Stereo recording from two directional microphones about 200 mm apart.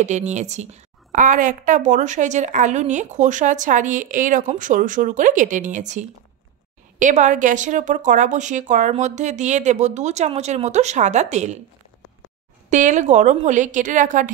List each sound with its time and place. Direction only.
0.0 s a woman's voice: 35° right (ahead or behind)
12.6 s a woman's voice: 35° right (ahead or behind)